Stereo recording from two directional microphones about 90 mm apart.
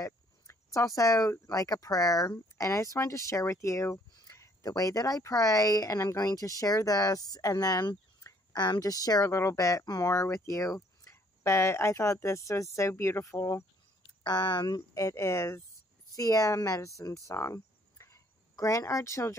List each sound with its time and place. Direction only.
0.0 s speech: 40° left (ahead or behind)
14.2 s speech: 55° left (ahead or behind)
15.0 s speech: 30° left (ahead or behind)
17.3 s cricket: 35° left (ahead or behind)